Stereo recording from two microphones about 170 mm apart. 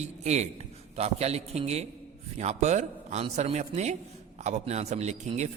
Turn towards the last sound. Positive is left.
turn(degrees=-40)  # may be behind; listen again after turning